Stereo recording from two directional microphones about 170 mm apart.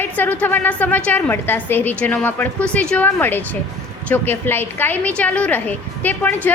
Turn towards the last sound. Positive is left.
turn(degrees=10)  # may be behind; listen again after turning